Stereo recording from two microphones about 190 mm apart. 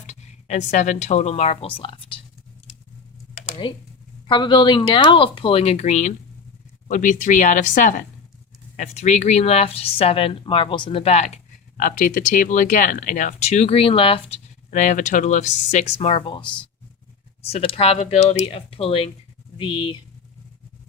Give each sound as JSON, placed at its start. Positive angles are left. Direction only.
{"t": 0.1, "sound": "speech", "side_deg": 35}
{"t": 3.3, "sound": "computer keyboard", "side_deg": 30}
{"t": 4.3, "sound": "speech", "side_deg": 25}
{"t": 14.7, "sound": "speech", "side_deg": 40}